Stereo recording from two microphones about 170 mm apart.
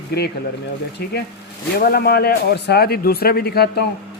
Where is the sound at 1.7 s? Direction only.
65° left (ahead or behind).